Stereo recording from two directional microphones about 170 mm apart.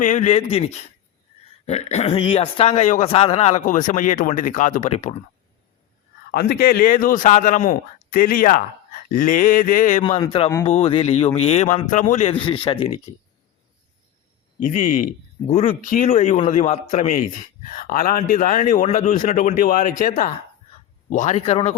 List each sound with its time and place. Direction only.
0.0 s speech: 45° left (ahead or behind)
6.3 s speech: 65° left (ahead or behind)
10.0 s speech: 30° left (ahead or behind)
14.6 s speech: 50° left (ahead or behind)
15.4 s speech: 40° left (ahead or behind)
17.7 s speech: 55° left (ahead or behind); by 21.8 s 40° left (ahead or behind)